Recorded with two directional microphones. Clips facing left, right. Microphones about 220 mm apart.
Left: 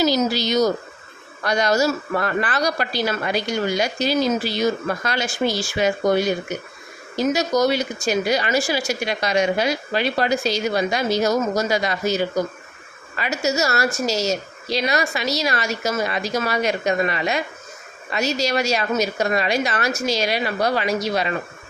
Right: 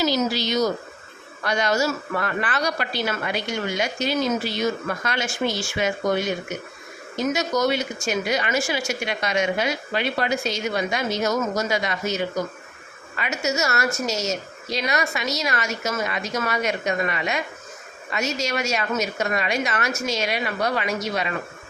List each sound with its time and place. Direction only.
0.0 s a woman's voice: 40° left (ahead or behind)